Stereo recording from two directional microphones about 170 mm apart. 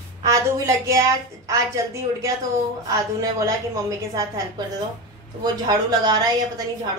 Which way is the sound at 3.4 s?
20° right (ahead or behind).